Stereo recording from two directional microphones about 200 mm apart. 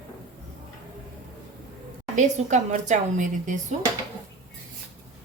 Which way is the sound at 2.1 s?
35° right (ahead or behind).